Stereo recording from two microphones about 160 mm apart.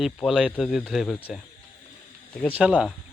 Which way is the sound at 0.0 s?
5° right (ahead or behind).